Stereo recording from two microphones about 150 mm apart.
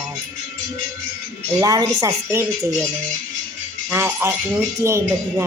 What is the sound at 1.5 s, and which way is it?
Speech, 25° right (ahead or behind).